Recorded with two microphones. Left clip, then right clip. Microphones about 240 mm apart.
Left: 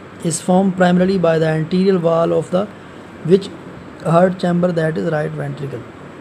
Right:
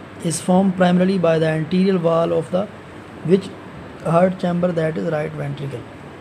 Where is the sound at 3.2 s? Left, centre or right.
Centre.